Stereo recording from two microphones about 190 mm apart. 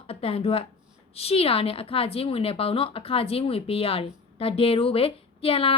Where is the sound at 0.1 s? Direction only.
30° left (ahead or behind).